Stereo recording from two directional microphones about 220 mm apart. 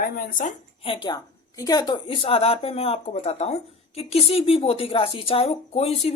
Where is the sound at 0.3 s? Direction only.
30° left (ahead or behind).